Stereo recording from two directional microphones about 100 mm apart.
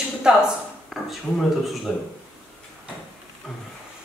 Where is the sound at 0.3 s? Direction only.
5° right (ahead or behind).